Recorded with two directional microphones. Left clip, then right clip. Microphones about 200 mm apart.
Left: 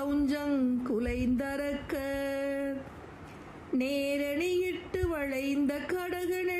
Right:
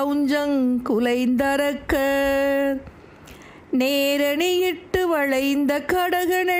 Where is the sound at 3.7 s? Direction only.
50° right (ahead or behind).